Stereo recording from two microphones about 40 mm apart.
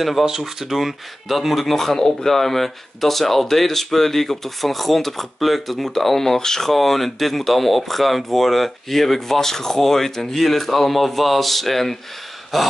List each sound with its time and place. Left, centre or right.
0.4 s speech: centre